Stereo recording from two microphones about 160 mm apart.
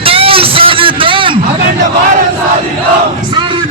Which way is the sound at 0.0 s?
35° right (ahead or behind).